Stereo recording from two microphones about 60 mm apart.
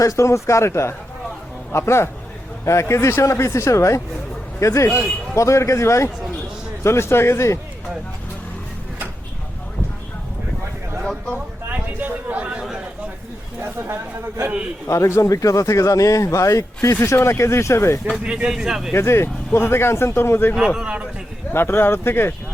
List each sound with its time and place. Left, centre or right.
0.0 s a man's voice: left
11.0 s a sound: centre
11.9 s a sound: right
13.6 s speech: right
14.8 s a man's voice: left
18.2 s speech: centre
18.9 s speech: left